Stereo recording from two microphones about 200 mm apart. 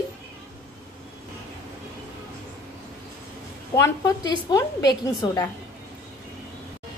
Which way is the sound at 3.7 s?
15° left (ahead or behind).